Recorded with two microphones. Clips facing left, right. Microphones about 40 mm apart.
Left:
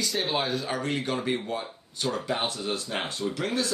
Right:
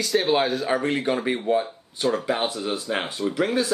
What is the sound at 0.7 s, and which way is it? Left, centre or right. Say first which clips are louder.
Speech: right 6 dB; right.